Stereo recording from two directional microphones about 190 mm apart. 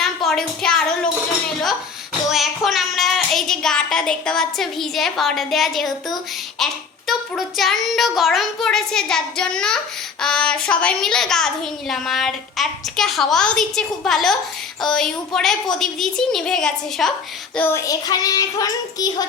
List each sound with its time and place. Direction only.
0.0 s a sound: centre (ahead or behind)
2.3 s a child's voice: centre (ahead or behind)
17.6 s a child's voice: 15° left (ahead or behind)